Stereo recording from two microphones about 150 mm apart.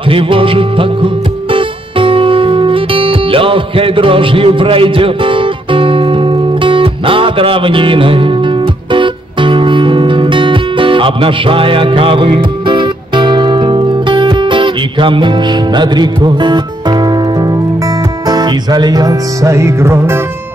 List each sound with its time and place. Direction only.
0.0 s music: 35° right (ahead or behind); by 20.2 s 15° right (ahead or behind)